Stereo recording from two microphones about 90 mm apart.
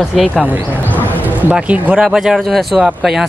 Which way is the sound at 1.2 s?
15° right (ahead or behind).